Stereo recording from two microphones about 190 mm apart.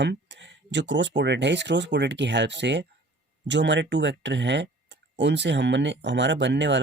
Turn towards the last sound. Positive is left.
turn(degrees=-70)  # may be behind; listen again after turning